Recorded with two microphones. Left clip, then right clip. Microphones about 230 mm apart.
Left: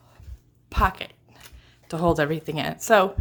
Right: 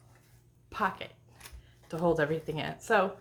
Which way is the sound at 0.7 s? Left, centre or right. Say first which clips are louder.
Left 8 dB; left.